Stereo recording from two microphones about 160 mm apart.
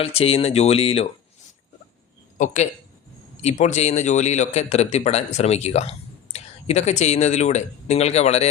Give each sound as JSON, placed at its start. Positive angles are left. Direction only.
{"t": 0.0, "sound": "speech", "side_deg": 40}
{"t": 2.4, "sound": "speech", "side_deg": 50}